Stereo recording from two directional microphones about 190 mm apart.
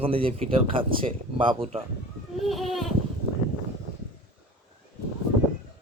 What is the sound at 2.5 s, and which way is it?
Goat, centre (ahead or behind).